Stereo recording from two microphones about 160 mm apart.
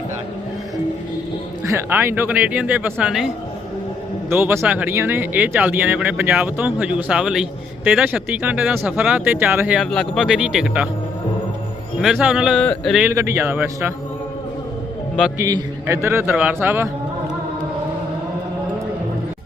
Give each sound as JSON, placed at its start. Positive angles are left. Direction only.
{"t": 1.6, "sound": "speech", "side_deg": -15}
{"t": 12.0, "sound": "speech", "side_deg": -5}
{"t": 13.1, "sound": "speech", "side_deg": -15}
{"t": 15.4, "sound": "speech", "side_deg": -20}